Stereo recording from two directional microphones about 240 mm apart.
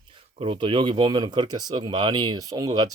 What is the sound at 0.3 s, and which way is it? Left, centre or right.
Speech, right.